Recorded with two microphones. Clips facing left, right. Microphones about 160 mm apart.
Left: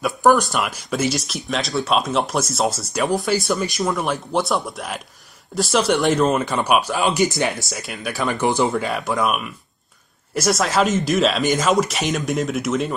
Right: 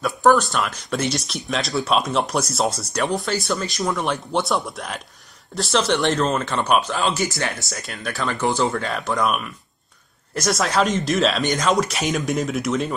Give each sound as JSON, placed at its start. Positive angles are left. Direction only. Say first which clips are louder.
{"t": 0.0, "sound": "speech", "louder": "left 1 dB", "side_deg": 0}
{"t": 7.5, "sound": "speech", "louder": "left 3 dB", "side_deg": 0}
{"t": 8.3, "sound": "speech", "louder": "left 2 dB", "side_deg": 20}
{"t": 8.7, "sound": "speech", "louder": "left 2 dB", "side_deg": 10}